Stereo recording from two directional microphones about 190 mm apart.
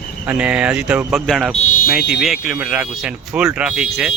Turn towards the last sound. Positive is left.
turn(degrees=-5)  # may be behind; listen again after turning